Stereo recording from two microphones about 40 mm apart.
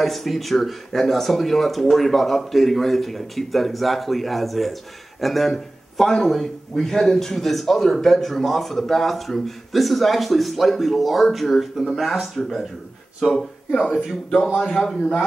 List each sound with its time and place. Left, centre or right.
0.0 s a man's voice: centre
14.6 s a man's voice: centre